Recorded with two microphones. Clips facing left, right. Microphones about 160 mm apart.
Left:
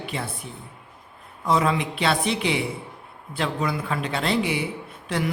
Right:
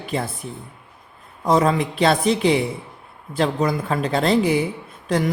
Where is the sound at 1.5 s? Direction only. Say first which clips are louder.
Right 4 dB; 40° right (ahead or behind).